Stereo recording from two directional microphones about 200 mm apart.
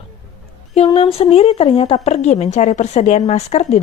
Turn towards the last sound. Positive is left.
turn(degrees=35)  # may be behind; listen again after turning